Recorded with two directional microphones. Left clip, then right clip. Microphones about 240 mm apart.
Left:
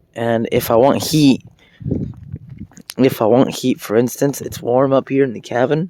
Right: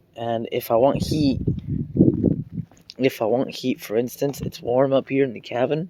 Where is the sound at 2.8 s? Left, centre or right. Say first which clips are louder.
Left 7 dB; left.